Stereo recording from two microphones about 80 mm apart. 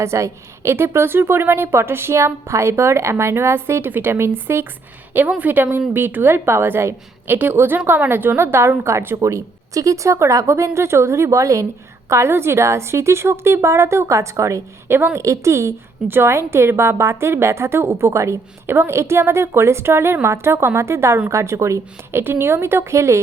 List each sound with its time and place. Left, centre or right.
0.0 s a woman's voice: right